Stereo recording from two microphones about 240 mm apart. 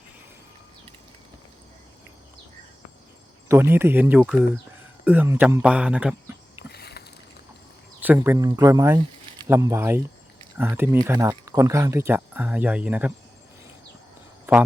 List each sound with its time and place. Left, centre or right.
3.5 s speech: centre
6.7 s rowboat: left
8.0 s speech: centre
14.5 s speech: centre